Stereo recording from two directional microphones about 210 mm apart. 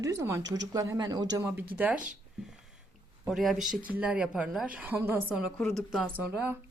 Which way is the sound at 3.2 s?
Centre (ahead or behind).